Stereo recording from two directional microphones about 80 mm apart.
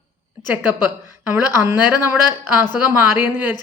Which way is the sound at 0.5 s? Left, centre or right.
Right.